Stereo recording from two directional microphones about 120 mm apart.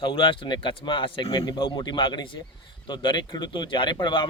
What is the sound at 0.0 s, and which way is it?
Speech, 45° left (ahead or behind).